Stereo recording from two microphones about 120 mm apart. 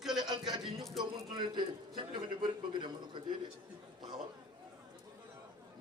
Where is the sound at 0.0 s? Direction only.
5° right (ahead or behind).